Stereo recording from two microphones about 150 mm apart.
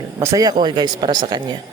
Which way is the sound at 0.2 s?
20° right (ahead or behind).